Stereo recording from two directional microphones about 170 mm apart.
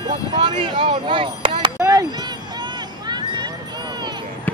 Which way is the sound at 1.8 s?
20° right (ahead or behind).